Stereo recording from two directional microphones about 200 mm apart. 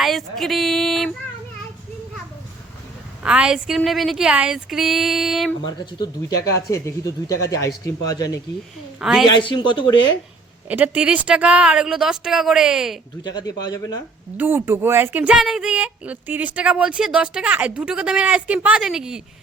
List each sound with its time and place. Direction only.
0.0 s speech: centre (ahead or behind)
3.2 s speech: 5° right (ahead or behind)
6.7 s speech: 15° left (ahead or behind)
9.0 s a woman's voice: centre (ahead or behind)
9.2 s speech: 25° left (ahead or behind)
10.7 s speech: 10° right (ahead or behind)
13.2 s speech: 20° left (ahead or behind)
14.3 s speech: 10° right (ahead or behind)